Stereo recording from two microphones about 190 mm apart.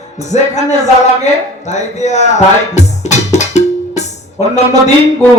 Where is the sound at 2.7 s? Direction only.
35° left (ahead or behind).